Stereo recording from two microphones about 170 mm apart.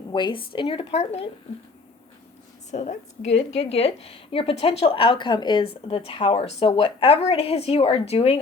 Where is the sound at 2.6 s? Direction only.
45° left (ahead or behind).